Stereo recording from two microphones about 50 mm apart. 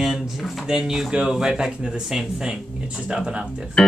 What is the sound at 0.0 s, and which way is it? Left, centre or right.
Speech, centre.